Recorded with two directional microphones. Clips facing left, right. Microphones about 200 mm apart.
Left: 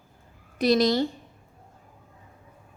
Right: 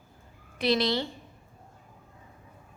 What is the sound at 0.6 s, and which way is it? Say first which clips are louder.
Speech: left 5 dB; 45° left (ahead or behind).